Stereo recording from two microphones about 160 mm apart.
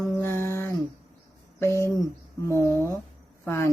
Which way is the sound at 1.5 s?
15° left (ahead or behind).